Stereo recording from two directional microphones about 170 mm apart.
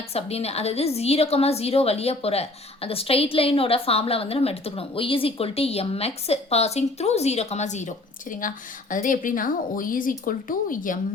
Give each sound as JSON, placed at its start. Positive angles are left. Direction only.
{"t": 0.1, "sound": "a woman's voice", "side_deg": 35}